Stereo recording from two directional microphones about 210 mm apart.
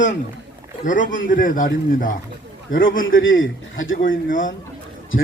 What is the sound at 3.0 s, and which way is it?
Speech, 65° left (ahead or behind).